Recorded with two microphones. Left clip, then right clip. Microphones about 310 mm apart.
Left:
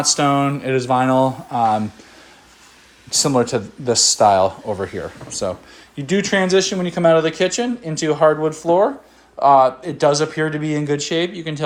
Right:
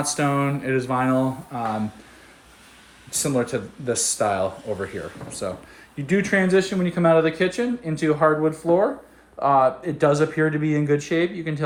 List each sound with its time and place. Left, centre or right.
0.0 s speech: centre
3.1 s speech: centre